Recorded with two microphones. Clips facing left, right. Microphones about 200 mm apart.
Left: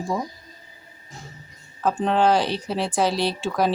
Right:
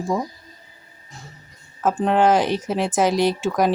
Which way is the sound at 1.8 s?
5° right (ahead or behind).